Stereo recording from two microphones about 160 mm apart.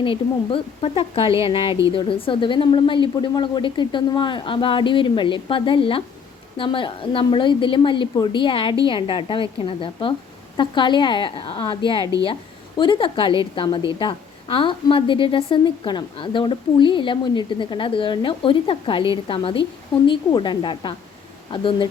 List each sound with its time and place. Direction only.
0.0 s a woman's voice: 35° left (ahead or behind)